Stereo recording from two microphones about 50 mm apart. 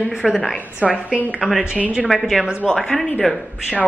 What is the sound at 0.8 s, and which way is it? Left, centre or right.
Speech, centre.